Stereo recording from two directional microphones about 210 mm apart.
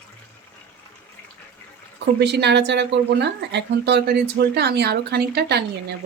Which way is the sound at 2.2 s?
55° right (ahead or behind).